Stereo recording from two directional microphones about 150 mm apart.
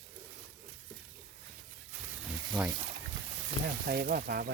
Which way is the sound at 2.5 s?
5° right (ahead or behind).